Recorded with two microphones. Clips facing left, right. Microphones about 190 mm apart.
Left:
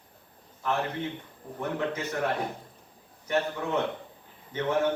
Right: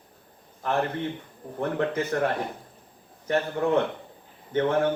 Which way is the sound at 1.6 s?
55° right (ahead or behind).